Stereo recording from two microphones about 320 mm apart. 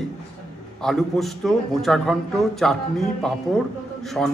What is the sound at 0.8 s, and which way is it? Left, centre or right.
A man's voice, centre.